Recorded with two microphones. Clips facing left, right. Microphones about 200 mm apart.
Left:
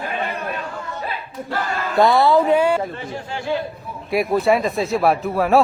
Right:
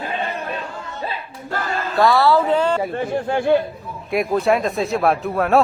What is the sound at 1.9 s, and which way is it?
Speech, 20° left (ahead or behind).